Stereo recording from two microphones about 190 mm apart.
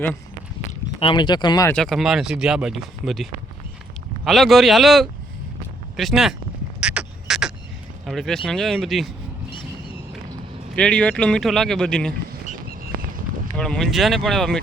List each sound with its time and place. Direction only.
0.9 s speech: 25° left (ahead or behind)
1.7 s speech: centre (ahead or behind)
6.7 s frog: 5° right (ahead or behind)
8.0 s speech: centre (ahead or behind)
9.5 s vehicle: 25° left (ahead or behind)
10.8 s speech: 5° left (ahead or behind)
13.6 s speech: 5° left (ahead or behind)